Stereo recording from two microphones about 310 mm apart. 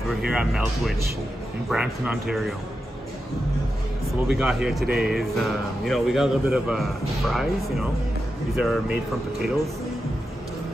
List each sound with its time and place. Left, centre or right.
0.1 s speech: centre
4.4 s speech: centre
4.8 s music: right
5.9 s speech: centre